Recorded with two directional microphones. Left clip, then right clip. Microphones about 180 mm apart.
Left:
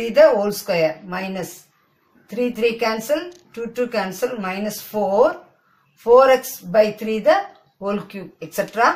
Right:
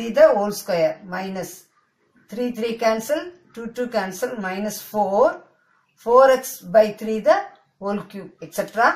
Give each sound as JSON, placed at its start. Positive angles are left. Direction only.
{"t": 0.1, "sound": "speech", "side_deg": 15}